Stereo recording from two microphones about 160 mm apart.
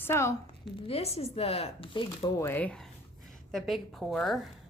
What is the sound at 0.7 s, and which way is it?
Speech, 35° left (ahead or behind).